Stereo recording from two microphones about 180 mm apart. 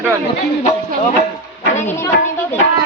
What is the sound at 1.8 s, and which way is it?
Speech, 15° left (ahead or behind).